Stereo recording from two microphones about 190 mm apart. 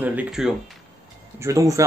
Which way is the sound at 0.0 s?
10° right (ahead or behind).